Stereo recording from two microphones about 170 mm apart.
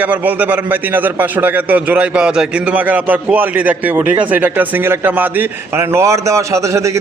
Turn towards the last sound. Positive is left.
turn(degrees=-20)  # may be behind; listen again after turning